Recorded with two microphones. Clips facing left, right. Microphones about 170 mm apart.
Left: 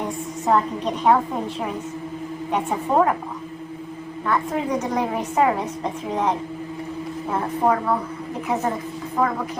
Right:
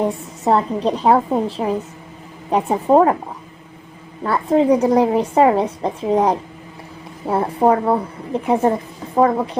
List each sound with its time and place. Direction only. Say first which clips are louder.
0.4 s a woman's voice: right 4 dB; 35° right (ahead or behind)
4.3 s a woman's voice: right 8 dB; 30° right (ahead or behind)